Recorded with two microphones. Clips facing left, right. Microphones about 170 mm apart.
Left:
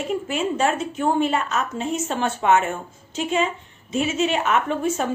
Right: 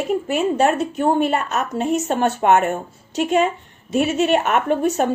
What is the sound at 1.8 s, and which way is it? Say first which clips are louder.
A woman's voice: right 8 dB; 55° right (ahead or behind).